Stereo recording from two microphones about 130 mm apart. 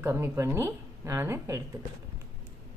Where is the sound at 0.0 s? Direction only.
20° right (ahead or behind).